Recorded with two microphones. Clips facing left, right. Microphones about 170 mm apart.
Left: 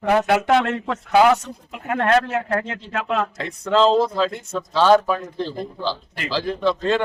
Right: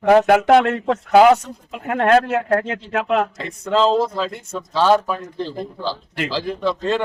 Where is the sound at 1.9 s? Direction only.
60° right (ahead or behind).